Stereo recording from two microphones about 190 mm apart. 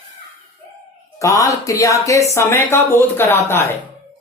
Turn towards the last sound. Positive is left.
turn(degrees=10)  # may be behind; listen again after turning